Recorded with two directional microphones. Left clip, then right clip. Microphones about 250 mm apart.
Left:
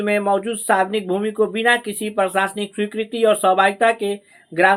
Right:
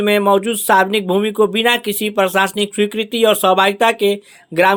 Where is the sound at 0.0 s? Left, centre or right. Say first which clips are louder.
Right 5 dB; right.